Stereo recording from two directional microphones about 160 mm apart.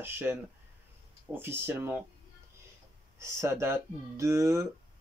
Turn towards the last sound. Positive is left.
turn(degrees=-20)  # may be behind; listen again after turning